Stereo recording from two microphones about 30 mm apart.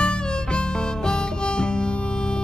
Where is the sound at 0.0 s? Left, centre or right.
Left.